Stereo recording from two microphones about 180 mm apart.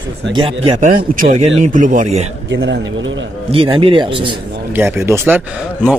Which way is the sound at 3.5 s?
30° right (ahead or behind).